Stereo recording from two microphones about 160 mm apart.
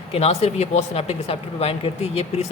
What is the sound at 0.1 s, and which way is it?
Speech, 40° left (ahead or behind).